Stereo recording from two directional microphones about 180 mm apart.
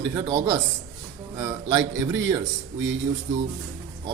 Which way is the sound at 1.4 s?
20° right (ahead or behind).